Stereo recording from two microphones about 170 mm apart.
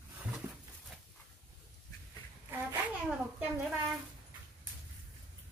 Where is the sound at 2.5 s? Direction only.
5° right (ahead or behind).